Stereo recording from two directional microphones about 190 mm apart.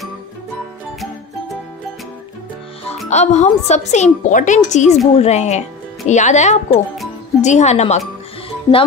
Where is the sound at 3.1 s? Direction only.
35° left (ahead or behind).